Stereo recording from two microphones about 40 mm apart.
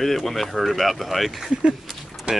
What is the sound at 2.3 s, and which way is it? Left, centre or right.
Music, right.